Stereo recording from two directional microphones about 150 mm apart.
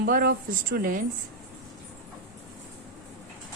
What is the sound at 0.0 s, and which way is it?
Speech, 85° right.